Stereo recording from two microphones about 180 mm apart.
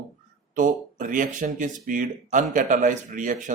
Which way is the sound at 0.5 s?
45° right (ahead or behind).